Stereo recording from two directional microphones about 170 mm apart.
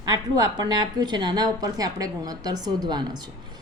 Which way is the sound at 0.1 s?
25° right (ahead or behind).